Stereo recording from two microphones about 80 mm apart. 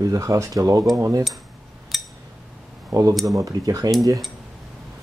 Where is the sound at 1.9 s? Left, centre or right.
Centre.